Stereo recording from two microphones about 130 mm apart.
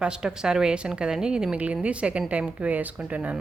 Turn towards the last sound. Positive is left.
turn(degrees=-10)  # may be behind; listen again after turning